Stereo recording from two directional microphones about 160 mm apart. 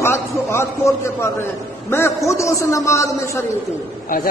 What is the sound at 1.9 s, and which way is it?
A man's voice, 15° left (ahead or behind).